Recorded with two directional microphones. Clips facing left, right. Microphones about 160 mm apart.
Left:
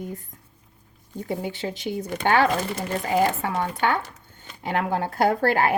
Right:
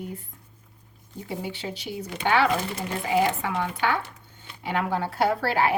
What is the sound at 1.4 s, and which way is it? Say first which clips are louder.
Speech: left 4 dB; 50° left (ahead or behind).